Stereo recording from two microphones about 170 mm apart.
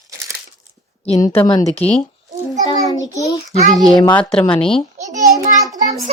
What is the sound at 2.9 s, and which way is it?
Speech, 20° left (ahead or behind).